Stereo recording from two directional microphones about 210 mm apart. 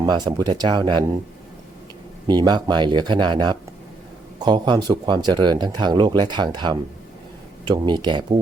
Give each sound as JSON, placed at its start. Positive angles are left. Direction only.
{"t": 0.0, "sound": "speech", "side_deg": -20}
{"t": 2.2, "sound": "speech", "side_deg": -20}